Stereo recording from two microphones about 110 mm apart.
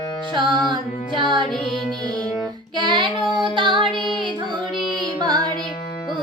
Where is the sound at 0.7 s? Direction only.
45° right (ahead or behind).